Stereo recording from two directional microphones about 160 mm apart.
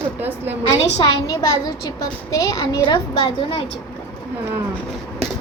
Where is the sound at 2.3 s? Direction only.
20° left (ahead or behind).